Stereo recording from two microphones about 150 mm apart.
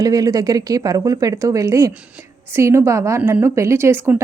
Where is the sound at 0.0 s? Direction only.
25° right (ahead or behind).